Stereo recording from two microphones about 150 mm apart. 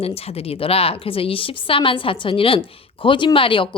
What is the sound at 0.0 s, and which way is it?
A woman's voice, 40° left (ahead or behind).